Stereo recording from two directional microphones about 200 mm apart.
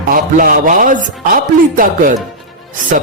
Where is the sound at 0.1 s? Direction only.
45° right (ahead or behind).